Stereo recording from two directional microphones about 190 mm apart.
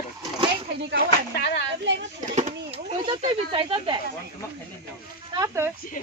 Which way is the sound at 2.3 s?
35° right (ahead or behind).